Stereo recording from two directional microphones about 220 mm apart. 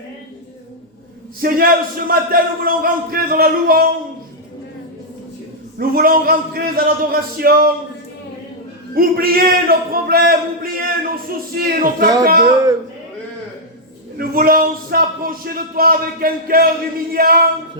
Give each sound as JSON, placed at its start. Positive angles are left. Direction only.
{"t": 1.4, "sound": "a man's voice", "side_deg": -40}
{"t": 5.8, "sound": "a man's voice", "side_deg": -40}
{"t": 9.0, "sound": "a man's voice", "side_deg": -40}
{"t": 14.2, "sound": "a man's voice", "side_deg": -40}